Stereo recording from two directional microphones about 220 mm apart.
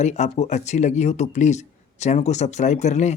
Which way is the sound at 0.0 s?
30° left (ahead or behind).